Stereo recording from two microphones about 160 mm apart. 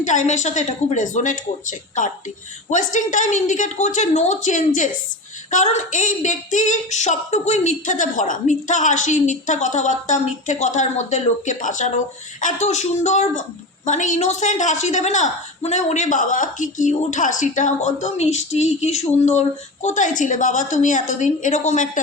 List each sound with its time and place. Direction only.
0.0 s a woman's voice: 50° left (ahead or behind)